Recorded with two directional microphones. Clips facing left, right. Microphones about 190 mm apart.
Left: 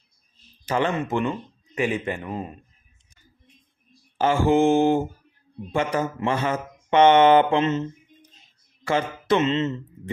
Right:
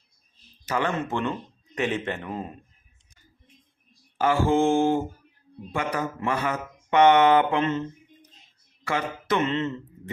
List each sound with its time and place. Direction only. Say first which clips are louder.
0.6 s speech: left 3 dB; 25° left (ahead or behind)
1.0 s speech: left 3 dB; 10° left (ahead or behind)
4.2 s speech: left 2 dB; 20° left (ahead or behind)
8.9 s speech: left 4 dB; 30° left (ahead or behind)